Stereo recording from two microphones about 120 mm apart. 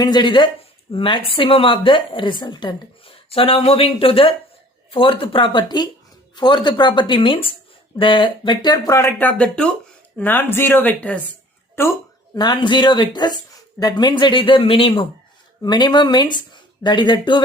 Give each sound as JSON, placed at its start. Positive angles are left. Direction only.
{"t": 0.0, "sound": "speech", "side_deg": 35}
{"t": 9.1, "sound": "speech", "side_deg": 10}
{"t": 12.3, "sound": "speech", "side_deg": 35}
{"t": 15.6, "sound": "speech", "side_deg": 35}